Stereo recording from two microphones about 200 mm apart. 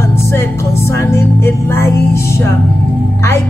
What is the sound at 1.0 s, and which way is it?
Music, 15° left (ahead or behind).